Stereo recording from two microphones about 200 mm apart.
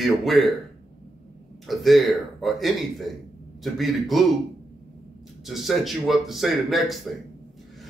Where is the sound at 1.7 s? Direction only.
Centre (ahead or behind).